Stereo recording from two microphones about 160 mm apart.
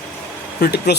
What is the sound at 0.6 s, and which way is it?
Speech, 80° left.